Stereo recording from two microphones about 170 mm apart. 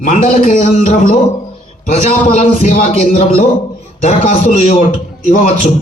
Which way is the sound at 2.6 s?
55° left (ahead or behind).